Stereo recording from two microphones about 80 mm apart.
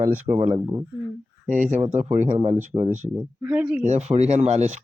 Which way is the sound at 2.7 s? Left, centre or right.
Right.